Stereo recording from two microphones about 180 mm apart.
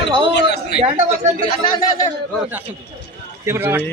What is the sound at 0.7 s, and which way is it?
Speech, 65° left (ahead or behind).